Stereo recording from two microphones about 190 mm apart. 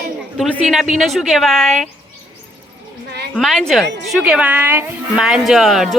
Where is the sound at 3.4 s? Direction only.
Centre (ahead or behind).